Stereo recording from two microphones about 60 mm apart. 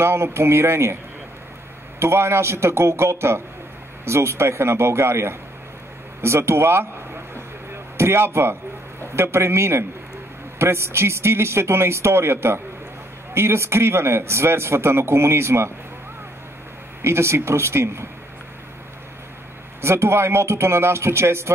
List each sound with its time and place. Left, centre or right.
0.0 s a man's voice: right
2.0 s a man's voice: right
7.3 s a sound: right
9.1 s a man's voice: right
17.0 s a man's voice: right
19.8 s a man's voice: right